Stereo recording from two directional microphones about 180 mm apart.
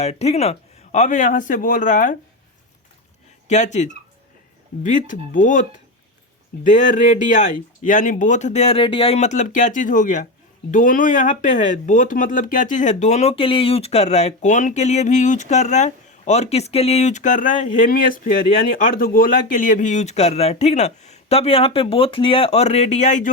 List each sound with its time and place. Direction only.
0.0 s speech: 35° left (ahead or behind)
3.4 s speech: 40° left (ahead or behind)
6.7 s speech: 45° left (ahead or behind)